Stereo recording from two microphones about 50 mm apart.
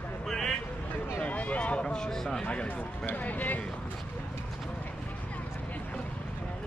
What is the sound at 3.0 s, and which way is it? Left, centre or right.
Speech, left.